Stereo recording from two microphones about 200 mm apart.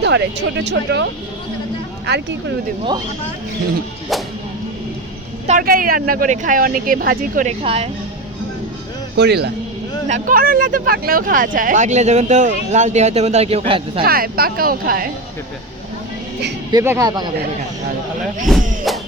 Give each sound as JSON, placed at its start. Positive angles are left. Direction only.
{"t": 0.0, "sound": "speech", "side_deg": -60}
{"t": 2.1, "sound": "speech", "side_deg": -55}
{"t": 5.5, "sound": "speech", "side_deg": -45}
{"t": 7.6, "sound": "speech", "side_deg": -30}
{"t": 9.1, "sound": "speech", "side_deg": -55}
{"t": 10.1, "sound": "speech", "side_deg": -45}
{"t": 14.0, "sound": "speech", "side_deg": -50}
{"t": 16.7, "sound": "speech", "side_deg": -15}
{"t": 18.9, "sound": "music", "side_deg": 0}